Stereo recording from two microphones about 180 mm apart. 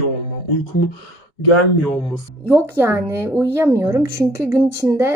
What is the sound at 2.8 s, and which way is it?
Speech, 15° right (ahead or behind).